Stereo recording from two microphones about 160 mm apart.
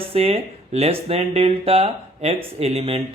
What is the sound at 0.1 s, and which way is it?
A man's voice, 40° right (ahead or behind).